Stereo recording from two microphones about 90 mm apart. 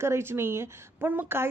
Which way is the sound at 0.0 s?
30° right (ahead or behind).